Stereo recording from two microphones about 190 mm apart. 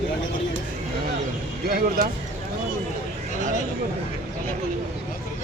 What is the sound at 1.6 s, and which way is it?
Speech, 50° right (ahead or behind).